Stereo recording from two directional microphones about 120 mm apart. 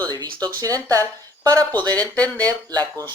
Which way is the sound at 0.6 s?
30° right (ahead or behind).